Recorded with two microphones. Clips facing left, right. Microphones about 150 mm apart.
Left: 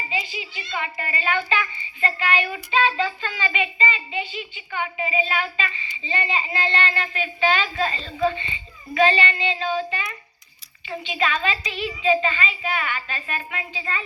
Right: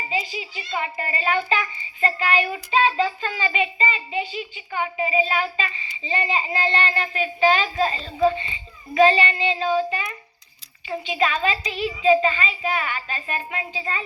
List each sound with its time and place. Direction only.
0.1 s a child's voice: 40° right (ahead or behind)